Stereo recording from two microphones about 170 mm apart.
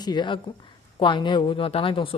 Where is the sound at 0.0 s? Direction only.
25° left (ahead or behind).